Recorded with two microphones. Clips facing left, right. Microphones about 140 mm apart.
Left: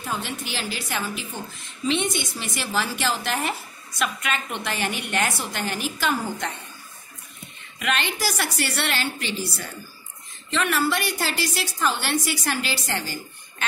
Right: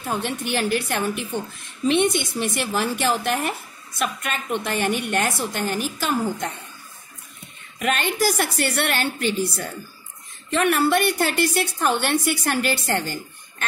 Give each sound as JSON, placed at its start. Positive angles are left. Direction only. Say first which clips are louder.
{"t": 0.1, "sound": "a woman's voice", "louder": "right 6 dB", "side_deg": -55}
{"t": 7.8, "sound": "a woman's voice", "louder": "right 4 dB", "side_deg": -45}
{"t": 10.5, "sound": "a woman's voice", "louder": "right 4 dB", "side_deg": -55}